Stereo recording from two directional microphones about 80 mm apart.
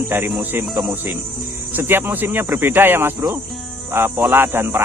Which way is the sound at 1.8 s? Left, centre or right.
Right.